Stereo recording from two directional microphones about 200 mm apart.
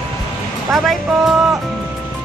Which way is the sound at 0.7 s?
Centre (ahead or behind).